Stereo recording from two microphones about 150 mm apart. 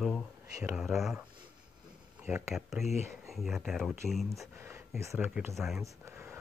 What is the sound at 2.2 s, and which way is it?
Speech, 15° right (ahead or behind).